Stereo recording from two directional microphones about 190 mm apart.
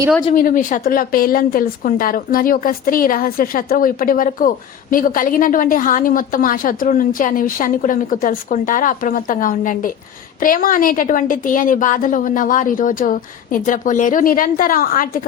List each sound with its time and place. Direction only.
0.3 s speech: 45° left (ahead or behind)